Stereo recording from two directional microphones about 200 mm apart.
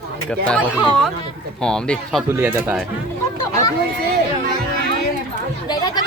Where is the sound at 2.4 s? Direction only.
10° right (ahead or behind).